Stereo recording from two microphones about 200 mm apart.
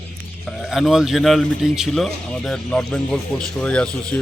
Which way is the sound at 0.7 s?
Centre (ahead or behind).